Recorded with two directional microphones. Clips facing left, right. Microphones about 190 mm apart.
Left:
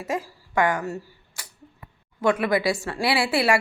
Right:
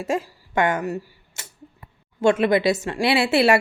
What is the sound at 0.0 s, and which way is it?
Speech, 25° right (ahead or behind).